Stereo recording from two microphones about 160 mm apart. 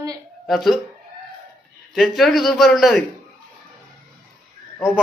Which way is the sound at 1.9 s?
Centre (ahead or behind).